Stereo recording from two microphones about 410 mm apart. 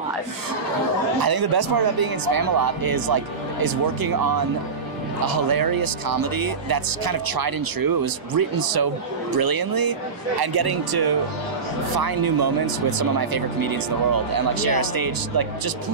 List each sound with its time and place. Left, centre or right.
1.2 s speech: right
5.2 s speech: right